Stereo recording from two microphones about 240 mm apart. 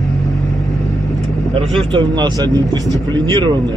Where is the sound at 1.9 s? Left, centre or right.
Centre.